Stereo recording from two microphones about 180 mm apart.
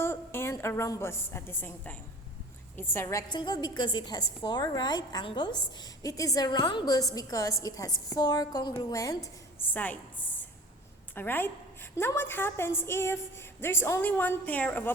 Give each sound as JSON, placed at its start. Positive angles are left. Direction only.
{"t": 0.0, "sound": "a woman's voice", "side_deg": 15}